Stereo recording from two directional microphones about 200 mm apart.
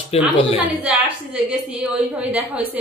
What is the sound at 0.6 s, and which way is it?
A woman's voice, 5° right (ahead or behind).